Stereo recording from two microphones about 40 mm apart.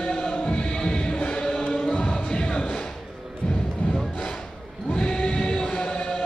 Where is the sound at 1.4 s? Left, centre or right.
Left.